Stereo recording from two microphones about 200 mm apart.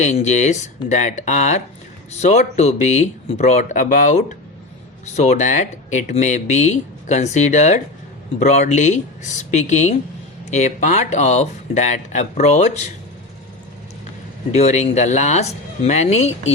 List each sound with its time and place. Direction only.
0.0 s speech: 35° left (ahead or behind)
14.5 s speech: 35° left (ahead or behind)